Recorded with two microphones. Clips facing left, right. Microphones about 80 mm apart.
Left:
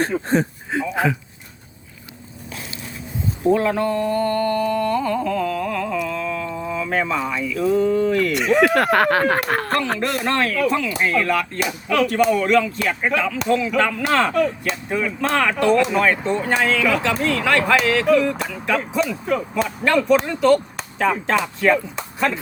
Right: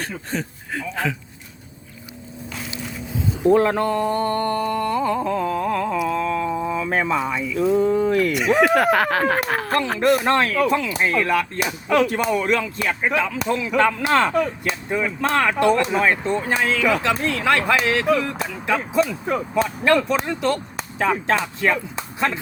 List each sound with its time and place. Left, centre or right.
0.0 s speech: left
0.7 s speech: centre
3.5 s speech: right
6.1 s a sound: right
6.5 s speech: right
8.3 s speech: centre
10.8 s speech: centre
16.2 s speech: centre